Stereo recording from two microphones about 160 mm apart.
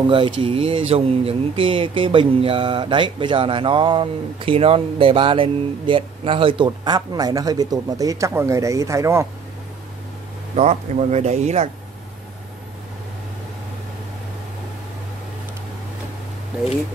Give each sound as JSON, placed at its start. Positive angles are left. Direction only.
{"t": 0.1, "sound": "speech", "side_deg": -35}
{"t": 10.5, "sound": "speech", "side_deg": -45}
{"t": 16.5, "sound": "speech", "side_deg": -5}